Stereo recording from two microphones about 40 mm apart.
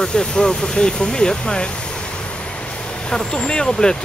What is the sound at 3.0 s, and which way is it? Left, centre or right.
Speech, left.